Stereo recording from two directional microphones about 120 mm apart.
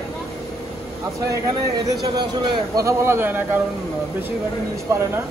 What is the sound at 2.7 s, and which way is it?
Speech, 25° right (ahead or behind).